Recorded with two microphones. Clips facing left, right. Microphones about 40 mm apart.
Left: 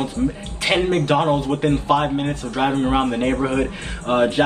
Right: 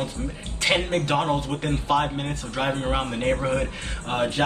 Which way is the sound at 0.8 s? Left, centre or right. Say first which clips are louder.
Left 6 dB; left.